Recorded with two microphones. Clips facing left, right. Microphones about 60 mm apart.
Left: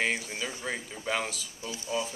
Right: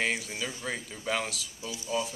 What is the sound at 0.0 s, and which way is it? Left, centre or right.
Speech, centre.